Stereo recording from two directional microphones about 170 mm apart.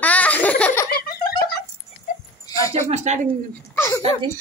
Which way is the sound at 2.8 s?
40° right (ahead or behind).